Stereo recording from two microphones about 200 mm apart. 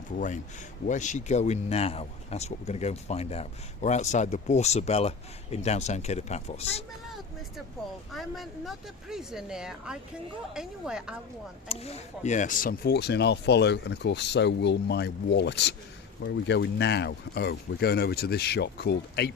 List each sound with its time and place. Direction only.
0.9 s speech: 35° left (ahead or behind)
8.1 s a woman's voice: centre (ahead or behind)
11.7 s speech: 30° left (ahead or behind); by 19.3 s 55° left (ahead or behind)